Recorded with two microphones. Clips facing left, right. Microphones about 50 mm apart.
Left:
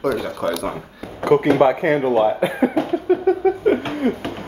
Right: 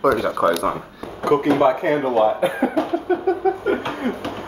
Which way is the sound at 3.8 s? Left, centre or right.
Centre.